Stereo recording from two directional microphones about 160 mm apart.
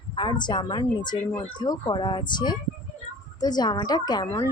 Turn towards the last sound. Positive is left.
turn(degrees=25)  # may be behind; listen again after turning